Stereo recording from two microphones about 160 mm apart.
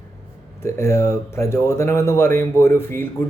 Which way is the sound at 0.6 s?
15° left (ahead or behind).